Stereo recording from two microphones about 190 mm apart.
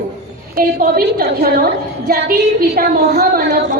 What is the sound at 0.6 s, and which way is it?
A woman's voice, 55° right (ahead or behind).